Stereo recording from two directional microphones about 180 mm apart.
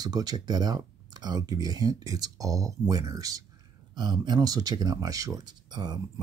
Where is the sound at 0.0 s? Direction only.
20° right (ahead or behind).